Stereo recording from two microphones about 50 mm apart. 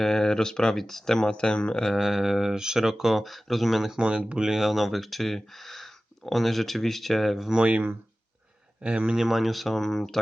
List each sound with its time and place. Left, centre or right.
0.0 s speech: centre
1.8 s speech: centre
3.9 s speech: centre
4.4 s speech: centre
7.6 s speech: right
9.1 s speech: centre